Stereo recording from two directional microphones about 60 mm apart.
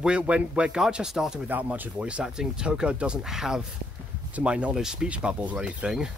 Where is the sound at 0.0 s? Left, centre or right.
Centre.